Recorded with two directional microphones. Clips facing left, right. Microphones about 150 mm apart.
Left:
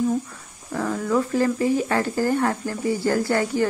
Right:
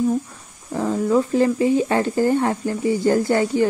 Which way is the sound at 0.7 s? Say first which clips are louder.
Right 4 dB; 20° right (ahead or behind).